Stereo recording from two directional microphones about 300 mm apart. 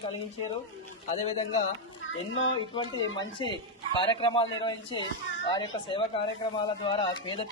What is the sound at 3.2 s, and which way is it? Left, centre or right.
Speech, centre.